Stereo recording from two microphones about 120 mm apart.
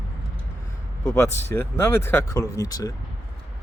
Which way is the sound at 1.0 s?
25° left (ahead or behind).